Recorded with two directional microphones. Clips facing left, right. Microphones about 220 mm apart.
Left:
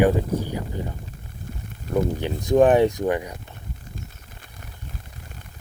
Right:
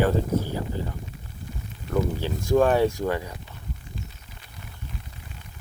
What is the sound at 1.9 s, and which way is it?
Speech, 20° left (ahead or behind).